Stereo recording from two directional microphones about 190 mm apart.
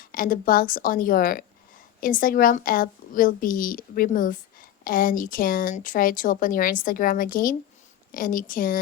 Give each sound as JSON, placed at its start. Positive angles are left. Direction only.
{"t": 0.0, "sound": "a woman's voice", "side_deg": 45}